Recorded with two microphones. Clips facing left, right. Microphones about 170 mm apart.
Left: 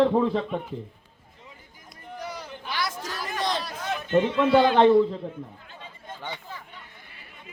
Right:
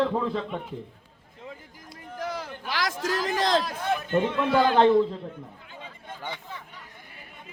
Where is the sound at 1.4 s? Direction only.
90° right.